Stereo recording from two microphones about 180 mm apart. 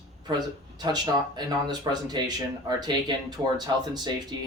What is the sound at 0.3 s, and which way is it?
Speech, 25° right (ahead or behind).